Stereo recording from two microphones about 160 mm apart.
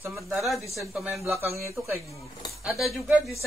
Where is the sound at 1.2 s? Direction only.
15° right (ahead or behind).